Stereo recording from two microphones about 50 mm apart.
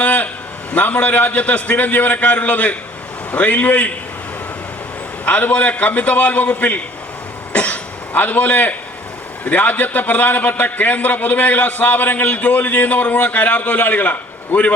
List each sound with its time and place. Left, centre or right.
0.0 s a sound: left
0.7 s a man's voice: left
5.2 s a man's voice: left
7.5 s cough: left
9.4 s a man's voice: left